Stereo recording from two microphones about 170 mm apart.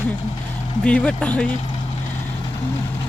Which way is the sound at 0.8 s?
5° left (ahead or behind).